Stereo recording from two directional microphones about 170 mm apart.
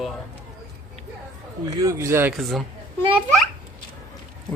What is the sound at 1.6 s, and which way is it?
Speech, 20° right (ahead or behind).